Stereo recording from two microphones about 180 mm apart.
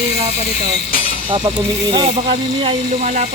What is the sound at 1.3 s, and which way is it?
Speech, 25° right (ahead or behind).